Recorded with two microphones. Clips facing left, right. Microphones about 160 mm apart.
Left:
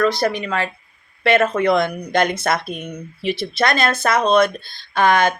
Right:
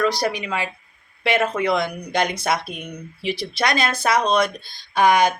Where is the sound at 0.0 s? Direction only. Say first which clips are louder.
Left 3 dB; 15° right (ahead or behind).